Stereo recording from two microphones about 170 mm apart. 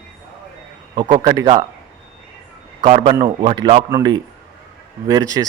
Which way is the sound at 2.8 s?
35° right (ahead or behind).